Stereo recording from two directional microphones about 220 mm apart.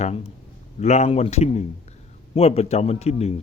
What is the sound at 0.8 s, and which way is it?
A man's voice, 30° left (ahead or behind).